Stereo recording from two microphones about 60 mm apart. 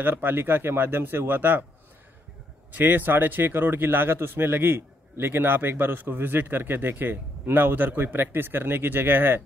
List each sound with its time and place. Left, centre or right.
0.0 s a man's voice: right
2.7 s a man's voice: right